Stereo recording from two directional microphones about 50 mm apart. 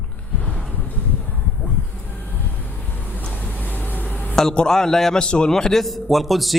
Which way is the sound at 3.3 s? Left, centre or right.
Left.